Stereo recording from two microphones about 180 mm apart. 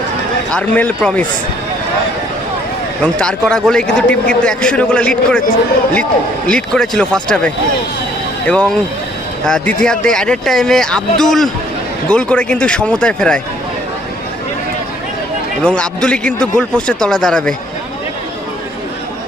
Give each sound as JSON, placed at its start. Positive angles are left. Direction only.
{"t": 0.5, "sound": "a man's voice", "side_deg": 5}
{"t": 3.0, "sound": "a man's voice", "side_deg": 5}
{"t": 6.5, "sound": "a man's voice", "side_deg": 5}
{"t": 15.6, "sound": "a man's voice", "side_deg": 5}